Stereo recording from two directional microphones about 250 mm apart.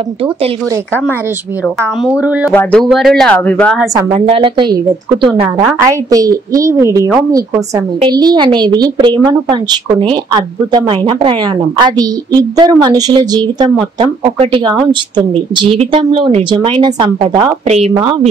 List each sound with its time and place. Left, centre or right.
1.8 s speech: centre
3.9 s a woman's voice: right